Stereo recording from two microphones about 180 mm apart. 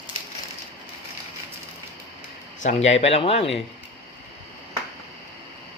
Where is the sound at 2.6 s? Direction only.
35° left (ahead or behind).